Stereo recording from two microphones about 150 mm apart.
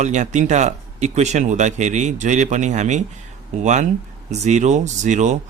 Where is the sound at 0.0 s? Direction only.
55° right (ahead or behind).